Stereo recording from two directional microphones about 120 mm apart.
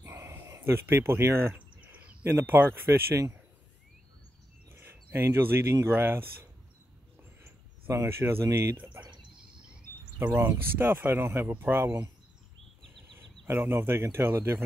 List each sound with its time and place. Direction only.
0.0 s a sound: 20° right (ahead or behind)
2.3 s speech: 20° right (ahead or behind)
4.6 s speech: 20° right (ahead or behind)
7.4 s speech: 20° right (ahead or behind)
10.1 s speech: 20° right (ahead or behind)
12.8 s a sound: centre (ahead or behind)
13.5 s speech: 20° right (ahead or behind)